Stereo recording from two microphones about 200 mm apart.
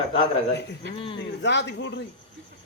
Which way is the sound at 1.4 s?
60° left (ahead or behind).